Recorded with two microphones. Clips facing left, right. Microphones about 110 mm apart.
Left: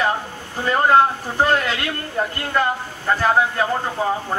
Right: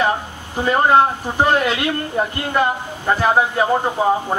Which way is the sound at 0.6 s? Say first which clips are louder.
Right 1 dB; 15° right (ahead or behind).